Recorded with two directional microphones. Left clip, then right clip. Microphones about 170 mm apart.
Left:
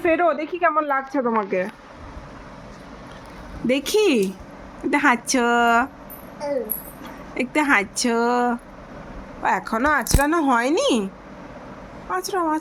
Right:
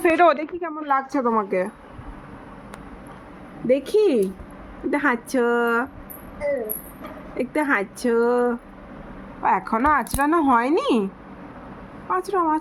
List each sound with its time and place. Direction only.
0.0 s a woman's voice: 20° right (ahead or behind)
0.7 s a woman's voice: 10° right (ahead or behind)
3.7 s speech: 20° left (ahead or behind)
7.3 s speech: 15° left (ahead or behind)
9.4 s speech: centre (ahead or behind)
12.0 s speech: centre (ahead or behind)